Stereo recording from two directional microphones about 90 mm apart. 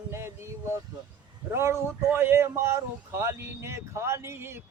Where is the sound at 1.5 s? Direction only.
30° right (ahead or behind).